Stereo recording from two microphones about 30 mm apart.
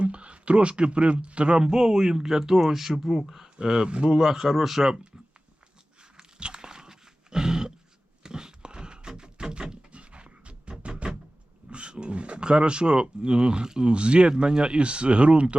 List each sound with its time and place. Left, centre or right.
0.0 s speech: right
1.5 s speech: right
6.1 s dog: right
8.2 s a sound: right
9.9 s dog: right
11.7 s speech: right